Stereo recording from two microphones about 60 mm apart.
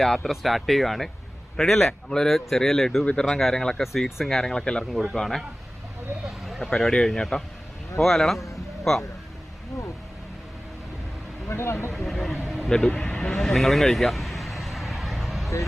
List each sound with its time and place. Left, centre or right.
0.0 s speech: centre
6.2 s a sound: centre
6.7 s speech: centre
11.4 s speech: left
11.9 s speech: centre
12.5 s a sound: centre
12.7 s vehicle: centre